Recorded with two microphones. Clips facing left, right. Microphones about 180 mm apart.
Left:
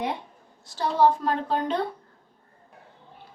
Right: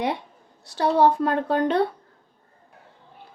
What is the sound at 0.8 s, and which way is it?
A woman's voice, 60° right (ahead or behind).